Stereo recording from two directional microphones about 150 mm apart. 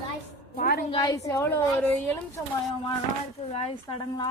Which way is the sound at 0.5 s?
80° left.